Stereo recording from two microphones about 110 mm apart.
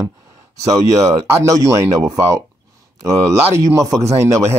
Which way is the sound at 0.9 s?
30° right (ahead or behind).